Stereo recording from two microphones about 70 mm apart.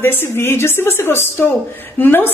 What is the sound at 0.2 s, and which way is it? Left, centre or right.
A woman's voice, left.